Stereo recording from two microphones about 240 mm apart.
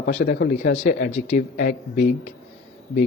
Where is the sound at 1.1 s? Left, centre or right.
Left.